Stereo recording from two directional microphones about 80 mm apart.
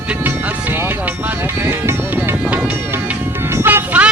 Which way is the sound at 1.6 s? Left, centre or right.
Right.